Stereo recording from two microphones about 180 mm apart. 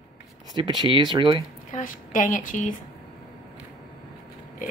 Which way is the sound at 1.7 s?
50° left (ahead or behind).